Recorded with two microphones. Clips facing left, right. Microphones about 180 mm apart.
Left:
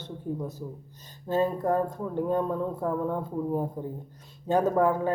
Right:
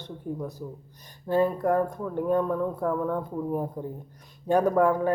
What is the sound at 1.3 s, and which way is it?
Speech, 20° left (ahead or behind).